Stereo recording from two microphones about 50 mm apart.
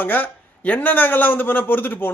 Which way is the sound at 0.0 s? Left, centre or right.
Left.